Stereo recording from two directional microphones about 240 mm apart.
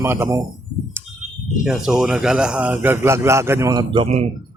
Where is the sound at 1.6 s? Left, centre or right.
Centre.